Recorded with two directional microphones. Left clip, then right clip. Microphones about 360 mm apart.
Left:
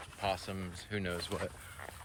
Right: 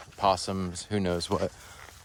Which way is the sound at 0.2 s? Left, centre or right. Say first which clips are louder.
Right 11 dB; centre.